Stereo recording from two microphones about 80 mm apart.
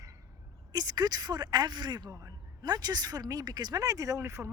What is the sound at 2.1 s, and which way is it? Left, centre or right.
Speech, right.